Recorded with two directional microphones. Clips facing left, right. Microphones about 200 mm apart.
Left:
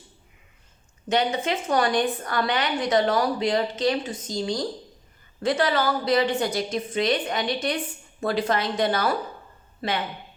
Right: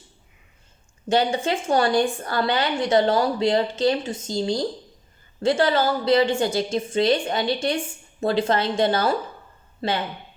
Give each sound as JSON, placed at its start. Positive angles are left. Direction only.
{"t": 1.0, "sound": "a woman's voice", "side_deg": -30}